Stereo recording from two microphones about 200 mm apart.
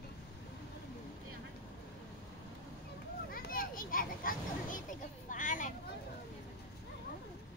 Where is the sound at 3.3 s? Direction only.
45° left (ahead or behind).